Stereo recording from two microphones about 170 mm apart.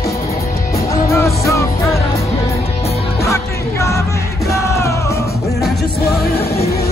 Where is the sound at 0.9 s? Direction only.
20° left (ahead or behind).